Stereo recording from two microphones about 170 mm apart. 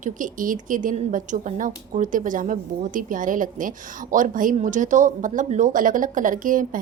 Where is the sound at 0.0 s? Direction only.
50° right (ahead or behind).